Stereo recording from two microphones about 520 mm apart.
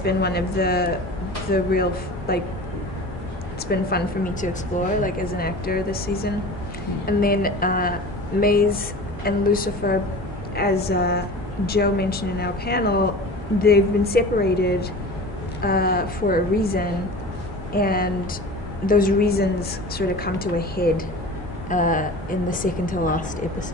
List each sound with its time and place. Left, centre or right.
0.0 s a woman's voice: centre
3.9 s a woman's voice: centre